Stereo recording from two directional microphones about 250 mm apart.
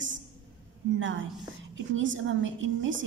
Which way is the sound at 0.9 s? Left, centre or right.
Right.